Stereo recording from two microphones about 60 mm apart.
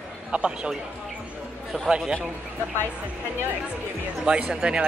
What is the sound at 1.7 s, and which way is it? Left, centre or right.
Speech, centre.